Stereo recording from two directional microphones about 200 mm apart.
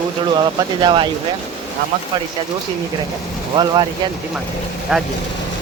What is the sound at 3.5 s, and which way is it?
Speech, 25° right (ahead or behind).